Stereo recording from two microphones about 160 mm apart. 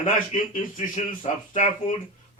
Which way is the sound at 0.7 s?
55° left (ahead or behind).